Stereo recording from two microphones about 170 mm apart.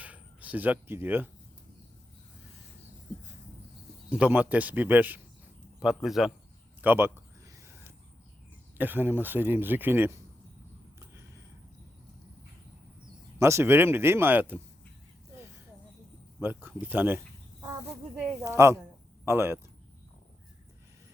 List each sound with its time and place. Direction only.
0.0 s speech: 10° right (ahead or behind)
4.1 s a man's voice: 10° right (ahead or behind)
6.8 s a sound: 10° right (ahead or behind)
8.8 s speech: 10° right (ahead or behind)
13.4 s speech: 15° right (ahead or behind)
16.4 s speech: 10° right (ahead or behind)
18.4 s speech: 15° right (ahead or behind)